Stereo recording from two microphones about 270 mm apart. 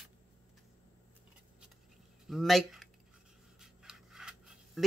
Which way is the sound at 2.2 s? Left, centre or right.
Centre.